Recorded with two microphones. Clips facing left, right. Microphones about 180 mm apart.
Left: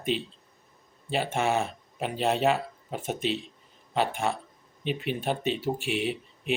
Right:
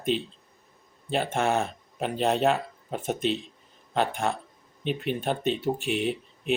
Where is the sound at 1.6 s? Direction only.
5° left (ahead or behind).